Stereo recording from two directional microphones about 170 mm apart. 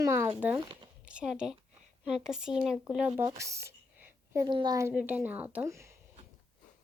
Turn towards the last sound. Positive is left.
turn(degrees=-15)  # may be behind; listen again after turning